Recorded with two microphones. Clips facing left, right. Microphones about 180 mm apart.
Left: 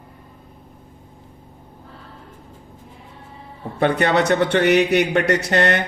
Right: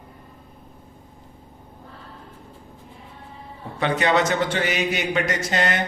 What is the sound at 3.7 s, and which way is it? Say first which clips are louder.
A man's voice: left 3 dB; 55° left (ahead or behind).